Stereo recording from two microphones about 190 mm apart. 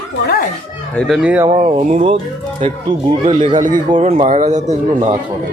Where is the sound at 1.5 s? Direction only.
30° right (ahead or behind).